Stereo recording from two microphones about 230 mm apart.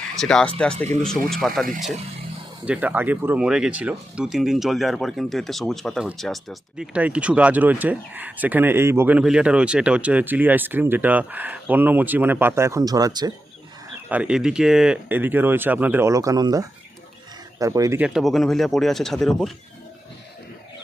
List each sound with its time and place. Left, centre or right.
0.2 s speech: centre
1.6 s speech: right
2.6 s speech: centre
14.1 s speech: centre